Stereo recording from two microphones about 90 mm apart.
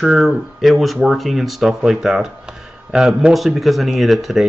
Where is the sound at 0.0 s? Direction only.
Centre (ahead or behind).